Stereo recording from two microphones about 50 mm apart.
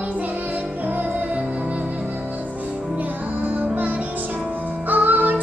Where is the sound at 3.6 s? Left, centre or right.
Right.